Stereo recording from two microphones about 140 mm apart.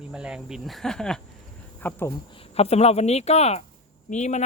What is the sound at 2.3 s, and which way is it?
Speech, 45° left (ahead or behind).